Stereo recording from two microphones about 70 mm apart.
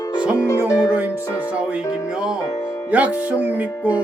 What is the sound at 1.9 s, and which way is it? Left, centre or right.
Speech, centre.